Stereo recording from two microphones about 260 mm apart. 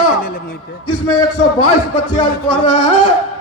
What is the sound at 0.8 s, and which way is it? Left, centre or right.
A man's voice, left.